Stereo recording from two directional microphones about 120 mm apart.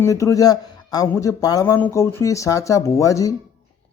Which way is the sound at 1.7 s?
20° left (ahead or behind).